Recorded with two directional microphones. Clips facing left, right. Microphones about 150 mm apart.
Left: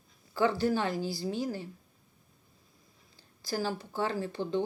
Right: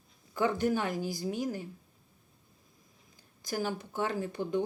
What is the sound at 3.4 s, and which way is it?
Speech, 15° right (ahead or behind).